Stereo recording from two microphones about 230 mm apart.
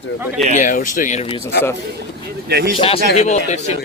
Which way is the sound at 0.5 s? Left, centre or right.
Left.